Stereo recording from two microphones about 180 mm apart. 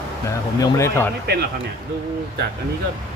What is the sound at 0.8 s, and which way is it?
Speech, 15° left (ahead or behind).